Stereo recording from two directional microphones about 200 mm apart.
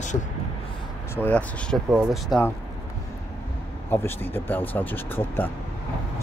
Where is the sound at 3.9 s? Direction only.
10° left (ahead or behind).